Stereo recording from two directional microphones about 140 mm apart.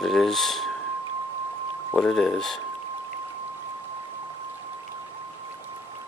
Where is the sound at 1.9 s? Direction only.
5° left (ahead or behind).